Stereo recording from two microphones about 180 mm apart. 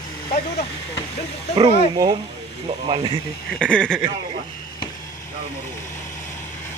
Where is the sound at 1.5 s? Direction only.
25° right (ahead or behind).